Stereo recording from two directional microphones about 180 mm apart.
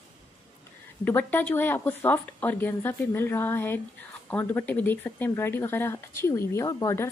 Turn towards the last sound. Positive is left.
turn(degrees=15)  # may be behind; listen again after turning